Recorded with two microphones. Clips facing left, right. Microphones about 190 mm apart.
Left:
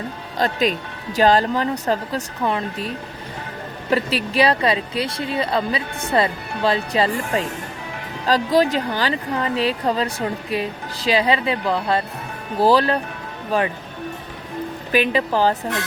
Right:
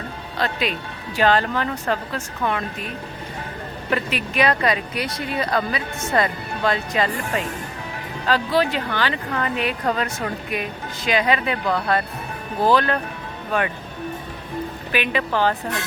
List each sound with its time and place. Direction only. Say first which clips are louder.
0.3 s speech: left 4 dB; 40° left (ahead or behind)
2.4 s speech: left 1 dB; 30° left (ahead or behind)
8.3 s speech: left 3 dB; 40° left (ahead or behind)
14.9 s speech: left 4 dB; 35° left (ahead or behind)